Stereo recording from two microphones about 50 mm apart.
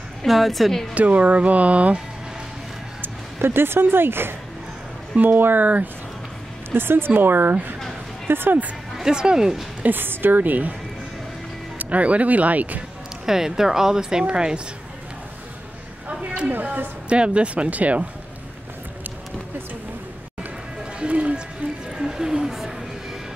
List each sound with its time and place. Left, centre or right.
0.2 s a woman's voice: centre
0.9 s speech: right
3.0 s speech: right
6.7 s speech: right
8.9 s speech: centre
9.8 s speech: right
11.8 s speech: right
13.2 s speech: centre
16.1 s speech: right
17.1 s speech: right
21.0 s music: right
21.9 s a sound: centre